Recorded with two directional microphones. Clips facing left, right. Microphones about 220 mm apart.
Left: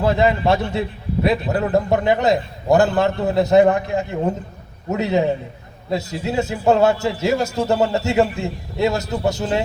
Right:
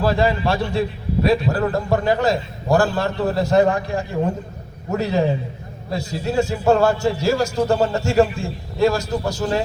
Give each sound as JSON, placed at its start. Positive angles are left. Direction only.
{"t": 0.0, "sound": "a man's voice", "side_deg": 20}